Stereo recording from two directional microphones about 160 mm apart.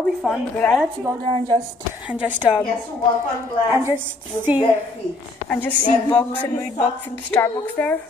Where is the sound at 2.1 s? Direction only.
5° right (ahead or behind).